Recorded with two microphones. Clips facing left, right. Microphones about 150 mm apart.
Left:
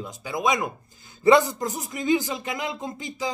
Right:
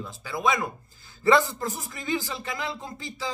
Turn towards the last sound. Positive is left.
turn(degrees=20)  # may be behind; listen again after turning